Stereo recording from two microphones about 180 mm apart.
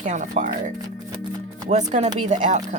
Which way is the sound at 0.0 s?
45° right (ahead or behind).